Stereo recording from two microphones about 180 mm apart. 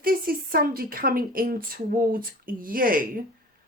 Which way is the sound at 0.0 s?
55° right (ahead or behind).